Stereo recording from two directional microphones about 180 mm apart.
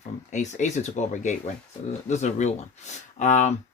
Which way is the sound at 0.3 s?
40° left (ahead or behind).